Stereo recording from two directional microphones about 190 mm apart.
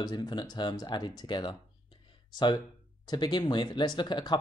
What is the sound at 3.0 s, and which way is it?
Speech, 20° left (ahead or behind).